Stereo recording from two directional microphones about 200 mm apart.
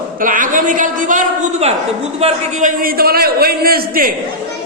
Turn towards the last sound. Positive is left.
turn(degrees=-45)  # may be behind; listen again after turning